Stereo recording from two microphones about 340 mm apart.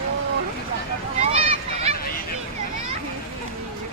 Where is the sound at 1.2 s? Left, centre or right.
Centre.